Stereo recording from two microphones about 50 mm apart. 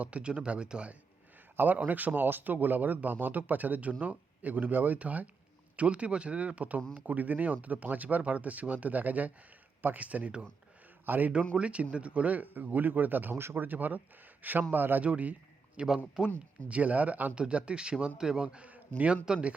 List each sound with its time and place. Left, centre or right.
0.0 s speech: right
1.5 s speech: right
11.0 s a man's voice: right
11.5 s speech: right
13.4 s speech: right
13.7 s speech: right
15.0 s a man's voice: right
17.3 s speech: right
19.1 s speech: centre